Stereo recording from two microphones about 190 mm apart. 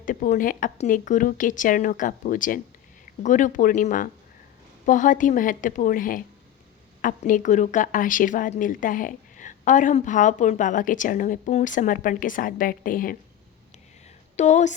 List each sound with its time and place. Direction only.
0.0 s speech: 45° left (ahead or behind)
14.3 s speech: 40° left (ahead or behind)